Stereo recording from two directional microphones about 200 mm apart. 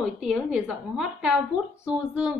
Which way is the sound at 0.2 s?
5° right (ahead or behind).